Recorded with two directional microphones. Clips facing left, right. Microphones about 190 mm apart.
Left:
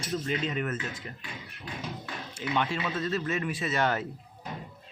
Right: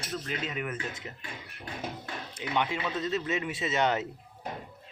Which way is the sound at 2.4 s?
20° right (ahead or behind).